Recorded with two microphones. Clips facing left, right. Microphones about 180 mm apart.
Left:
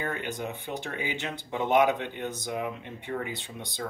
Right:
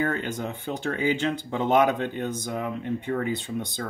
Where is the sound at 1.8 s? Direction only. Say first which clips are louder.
Even; 50° right (ahead or behind).